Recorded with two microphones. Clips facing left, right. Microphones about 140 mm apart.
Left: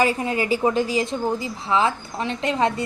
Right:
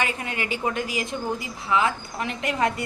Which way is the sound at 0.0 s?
35° left (ahead or behind).